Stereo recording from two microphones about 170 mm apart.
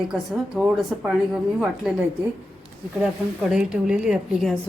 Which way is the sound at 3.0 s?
5° right (ahead or behind).